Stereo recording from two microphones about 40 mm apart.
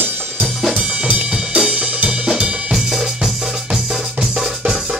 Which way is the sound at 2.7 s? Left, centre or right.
Centre.